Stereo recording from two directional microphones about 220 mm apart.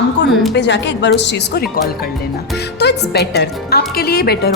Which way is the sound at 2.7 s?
50° left (ahead or behind).